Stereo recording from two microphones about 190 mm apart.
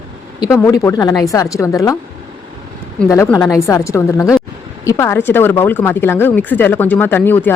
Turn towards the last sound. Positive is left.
turn(degrees=10)  # may be behind; listen again after turning